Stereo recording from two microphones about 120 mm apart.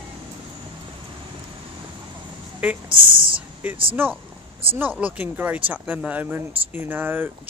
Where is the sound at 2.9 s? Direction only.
45° right (ahead or behind).